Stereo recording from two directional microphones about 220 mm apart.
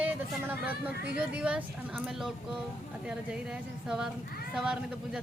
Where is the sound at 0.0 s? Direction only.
10° right (ahead or behind).